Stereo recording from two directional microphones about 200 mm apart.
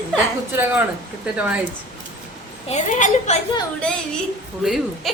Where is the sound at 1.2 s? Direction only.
5° right (ahead or behind).